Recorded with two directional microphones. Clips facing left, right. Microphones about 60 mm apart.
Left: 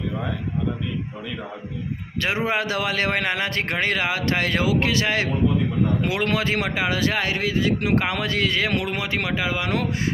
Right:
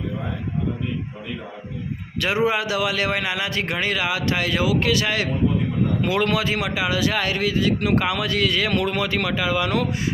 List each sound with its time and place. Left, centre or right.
2.2 s a man's voice: left
7.2 s a man's voice: left
8.8 s a man's voice: centre